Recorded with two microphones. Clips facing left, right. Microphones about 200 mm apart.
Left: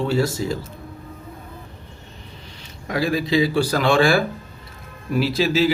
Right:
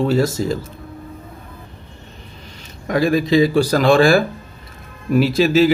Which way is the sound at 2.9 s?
45° right (ahead or behind).